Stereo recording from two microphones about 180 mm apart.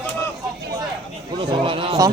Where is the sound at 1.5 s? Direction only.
30° right (ahead or behind).